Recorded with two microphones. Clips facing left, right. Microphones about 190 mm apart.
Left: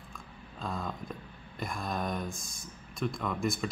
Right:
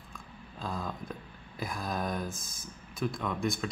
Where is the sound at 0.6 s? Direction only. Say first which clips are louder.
Even; centre (ahead or behind).